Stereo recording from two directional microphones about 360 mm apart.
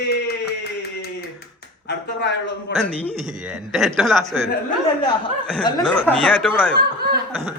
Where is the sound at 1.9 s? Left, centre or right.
Left.